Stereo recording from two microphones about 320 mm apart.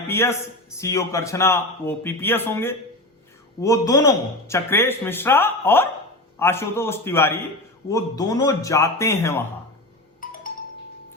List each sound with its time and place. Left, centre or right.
0.1 s speech: centre
10.2 s music: left